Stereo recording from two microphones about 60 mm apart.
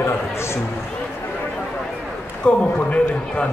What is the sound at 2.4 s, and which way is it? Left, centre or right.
A man's voice, centre.